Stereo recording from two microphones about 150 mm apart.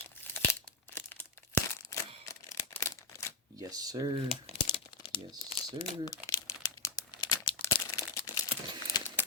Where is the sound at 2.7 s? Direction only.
20° left (ahead or behind).